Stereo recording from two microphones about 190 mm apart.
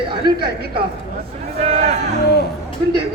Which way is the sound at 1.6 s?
35° right (ahead or behind).